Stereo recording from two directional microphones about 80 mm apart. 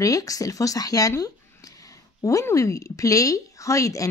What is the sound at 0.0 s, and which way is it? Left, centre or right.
A woman's voice, left.